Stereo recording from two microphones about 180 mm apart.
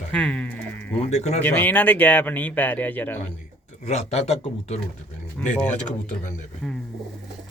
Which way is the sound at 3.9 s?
35° left (ahead or behind).